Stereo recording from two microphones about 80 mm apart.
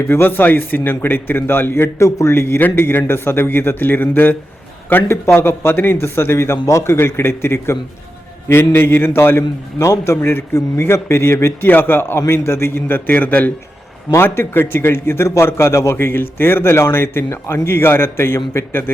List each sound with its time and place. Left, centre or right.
0.0 s a man's voice: left